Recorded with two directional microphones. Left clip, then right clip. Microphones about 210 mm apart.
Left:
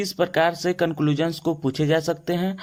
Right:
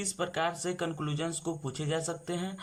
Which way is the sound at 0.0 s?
30° left (ahead or behind).